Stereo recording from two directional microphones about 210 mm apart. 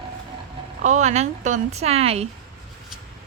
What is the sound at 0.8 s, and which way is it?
Speech, 35° right (ahead or behind).